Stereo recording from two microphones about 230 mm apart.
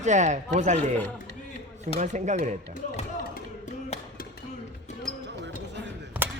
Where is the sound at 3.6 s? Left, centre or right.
Left.